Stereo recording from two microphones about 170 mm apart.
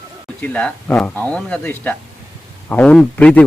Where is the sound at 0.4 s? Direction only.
10° left (ahead or behind).